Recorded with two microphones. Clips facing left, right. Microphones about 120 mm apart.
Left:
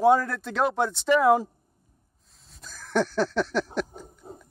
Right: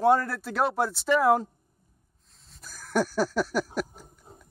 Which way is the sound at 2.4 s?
Centre (ahead or behind).